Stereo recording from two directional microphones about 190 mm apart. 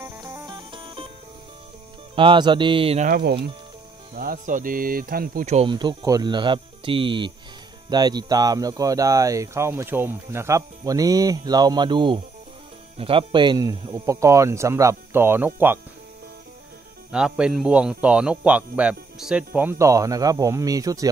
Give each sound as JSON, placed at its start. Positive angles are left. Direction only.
{"t": 0.0, "sound": "music", "side_deg": -15}
{"t": 2.1, "sound": "speech", "side_deg": -25}
{"t": 3.1, "sound": "speech", "side_deg": -55}
{"t": 5.7, "sound": "speech", "side_deg": -25}
{"t": 17.1, "sound": "speech", "side_deg": -5}